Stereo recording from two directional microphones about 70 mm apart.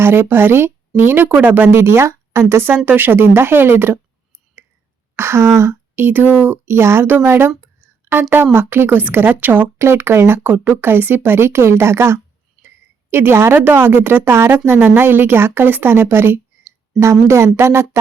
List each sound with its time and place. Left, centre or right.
0.0 s a woman's voice: right
5.1 s speech: right
7.6 s a sound: right
8.5 s a woman's voice: right